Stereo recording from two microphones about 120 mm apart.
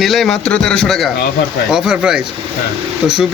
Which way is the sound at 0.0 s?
Centre (ahead or behind).